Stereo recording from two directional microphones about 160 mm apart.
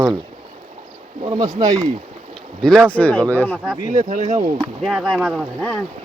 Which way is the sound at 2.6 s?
5° left (ahead or behind).